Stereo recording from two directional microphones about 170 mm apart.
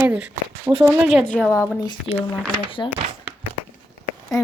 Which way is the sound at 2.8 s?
15° left (ahead or behind).